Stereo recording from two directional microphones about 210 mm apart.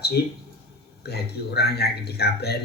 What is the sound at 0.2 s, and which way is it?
Speech, 50° left (ahead or behind).